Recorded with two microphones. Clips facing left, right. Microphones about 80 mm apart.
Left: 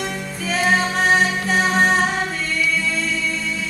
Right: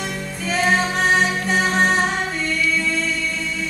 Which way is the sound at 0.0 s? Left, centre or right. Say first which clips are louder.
Left 1 dB; centre.